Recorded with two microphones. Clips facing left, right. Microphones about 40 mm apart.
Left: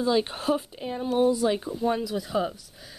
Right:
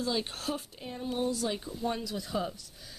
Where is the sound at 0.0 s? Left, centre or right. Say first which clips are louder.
Left 8 dB; left.